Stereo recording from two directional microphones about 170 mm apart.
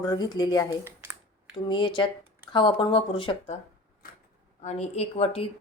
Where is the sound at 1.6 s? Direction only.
25° left (ahead or behind).